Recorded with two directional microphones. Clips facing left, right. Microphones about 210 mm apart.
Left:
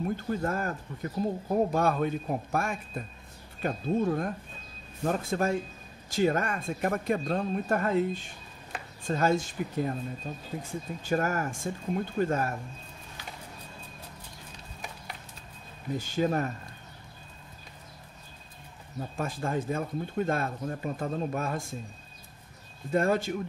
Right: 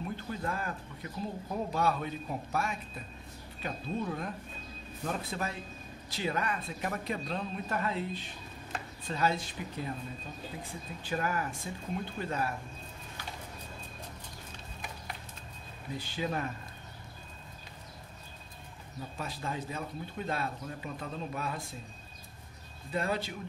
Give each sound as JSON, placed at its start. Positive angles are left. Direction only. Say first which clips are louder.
{"t": 0.3, "sound": "speech", "louder": "left 5 dB", "side_deg": 45}
{"t": 16.0, "sound": "speech", "louder": "left 7 dB", "side_deg": 45}
{"t": 19.1, "sound": "speech", "louder": "left 7 dB", "side_deg": 50}
{"t": 22.8, "sound": "speech", "louder": "left 7 dB", "side_deg": 45}